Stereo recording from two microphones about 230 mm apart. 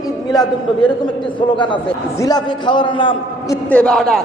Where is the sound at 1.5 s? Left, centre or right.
Left.